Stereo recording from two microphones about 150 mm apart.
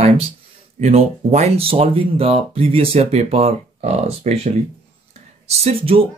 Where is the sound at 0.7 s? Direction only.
50° right (ahead or behind).